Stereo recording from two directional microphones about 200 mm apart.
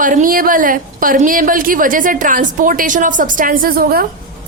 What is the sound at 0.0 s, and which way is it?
A woman's voice, 40° right (ahead or behind).